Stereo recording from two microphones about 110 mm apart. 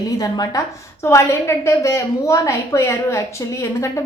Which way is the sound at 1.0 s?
25° left (ahead or behind).